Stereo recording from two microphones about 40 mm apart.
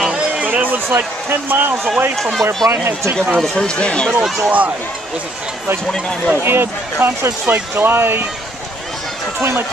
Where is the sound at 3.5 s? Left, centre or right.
Left.